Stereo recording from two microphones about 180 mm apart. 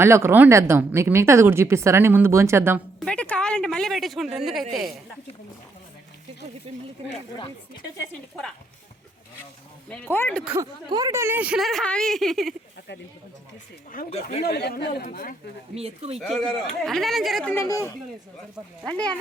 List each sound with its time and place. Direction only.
0.0 s a woman's voice: 15° right (ahead or behind)
3.0 s a woman's voice: 5° left (ahead or behind)
9.9 s speech: 10° left (ahead or behind)
10.6 s speech: 20° right (ahead or behind); by 12.5 s centre (ahead or behind)
14.1 s speech: 35° left (ahead or behind)
14.4 s a man's voice: 65° left (ahead or behind)
15.0 s speech: 50° left (ahead or behind)
15.7 s speech: 35° right (ahead or behind)
16.8 s speech: centre (ahead or behind)
17.5 s speech: 15° left (ahead or behind)
18.9 s speech: 5° left (ahead or behind)